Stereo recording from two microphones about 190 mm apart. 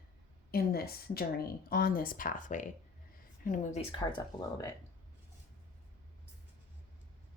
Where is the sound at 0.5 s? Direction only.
55° left (ahead or behind).